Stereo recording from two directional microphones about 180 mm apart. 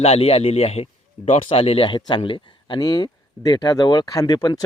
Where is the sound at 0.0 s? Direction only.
35° left (ahead or behind).